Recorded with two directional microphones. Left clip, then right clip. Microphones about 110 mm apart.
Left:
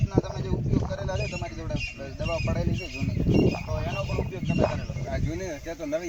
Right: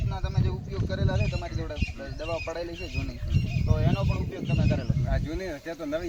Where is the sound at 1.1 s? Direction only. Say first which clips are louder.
Left 1 dB; centre (ahead or behind).